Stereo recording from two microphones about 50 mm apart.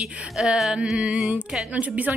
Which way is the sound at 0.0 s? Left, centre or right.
Centre.